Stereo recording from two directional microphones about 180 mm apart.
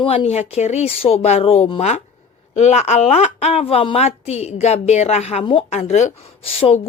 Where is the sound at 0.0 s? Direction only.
30° left (ahead or behind).